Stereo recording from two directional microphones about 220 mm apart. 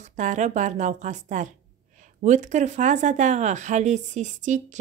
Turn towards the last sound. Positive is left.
turn(degrees=-35)  # may be behind; listen again after turning